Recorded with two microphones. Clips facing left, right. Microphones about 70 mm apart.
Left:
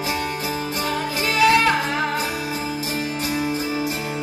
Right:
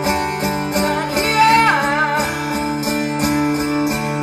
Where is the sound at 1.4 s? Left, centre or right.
Right.